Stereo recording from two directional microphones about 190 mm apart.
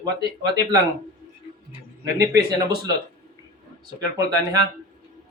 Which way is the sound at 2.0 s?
15° right (ahead or behind).